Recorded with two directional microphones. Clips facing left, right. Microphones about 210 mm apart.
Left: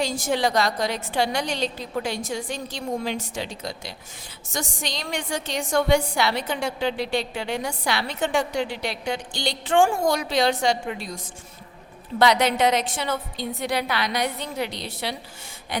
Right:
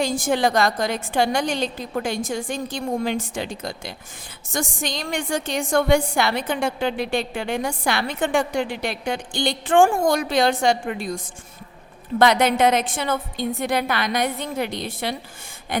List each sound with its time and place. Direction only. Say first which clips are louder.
0.0 s a woman's voice: right 3 dB; 50° right (ahead or behind)